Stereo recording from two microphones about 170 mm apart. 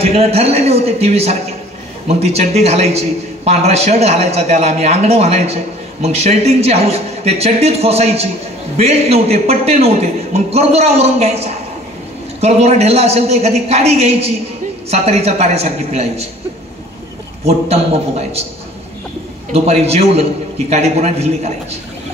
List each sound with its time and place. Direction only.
0.0 s a man's voice: 35° right (ahead or behind)
17.5 s a man's voice: 35° right (ahead or behind)
19.5 s a man's voice: 35° right (ahead or behind)